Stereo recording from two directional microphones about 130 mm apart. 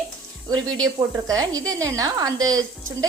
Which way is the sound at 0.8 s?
30° right (ahead or behind).